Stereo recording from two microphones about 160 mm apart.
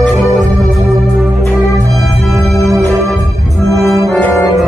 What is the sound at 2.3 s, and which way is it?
Music, centre (ahead or behind).